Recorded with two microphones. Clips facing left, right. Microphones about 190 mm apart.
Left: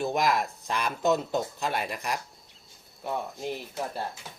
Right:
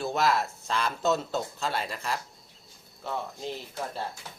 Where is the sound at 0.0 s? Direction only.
15° left (ahead or behind).